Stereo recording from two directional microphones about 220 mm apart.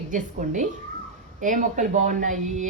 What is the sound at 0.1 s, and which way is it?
Speech, 35° right (ahead or behind).